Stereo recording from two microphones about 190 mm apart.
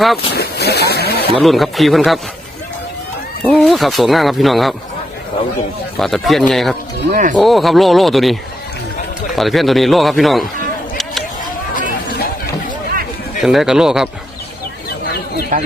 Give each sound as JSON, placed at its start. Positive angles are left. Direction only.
{"t": 0.3, "sound": "a sound", "side_deg": 60}
{"t": 1.3, "sound": "speech", "side_deg": 0}
{"t": 3.4, "sound": "speech", "side_deg": 5}
{"t": 6.0, "sound": "speech", "side_deg": 0}
{"t": 7.1, "sound": "speech", "side_deg": -40}
{"t": 7.3, "sound": "speech", "side_deg": 0}
{"t": 11.7, "sound": "a sound", "side_deg": 45}
{"t": 13.4, "sound": "speech", "side_deg": 0}
{"t": 14.8, "sound": "a sound", "side_deg": 55}
{"t": 15.5, "sound": "speech", "side_deg": -45}